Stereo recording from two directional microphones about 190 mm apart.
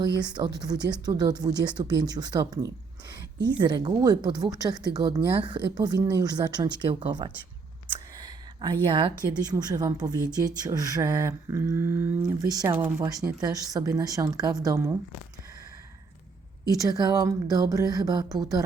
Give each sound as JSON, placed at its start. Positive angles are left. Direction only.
{"t": 0.2, "sound": "speech", "side_deg": -20}
{"t": 16.6, "sound": "speech", "side_deg": -20}